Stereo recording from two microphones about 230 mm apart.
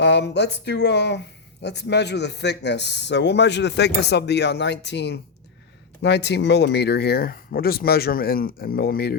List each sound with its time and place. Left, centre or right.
0.0 s speech: left